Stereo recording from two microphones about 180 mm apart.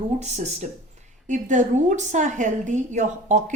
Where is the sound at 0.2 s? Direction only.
40° right (ahead or behind).